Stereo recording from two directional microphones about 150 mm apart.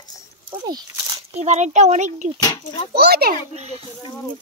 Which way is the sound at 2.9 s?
90° right.